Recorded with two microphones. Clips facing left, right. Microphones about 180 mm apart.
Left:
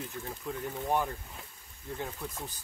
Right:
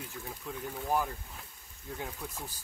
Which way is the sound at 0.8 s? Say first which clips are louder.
Left 1 dB; centre (ahead or behind).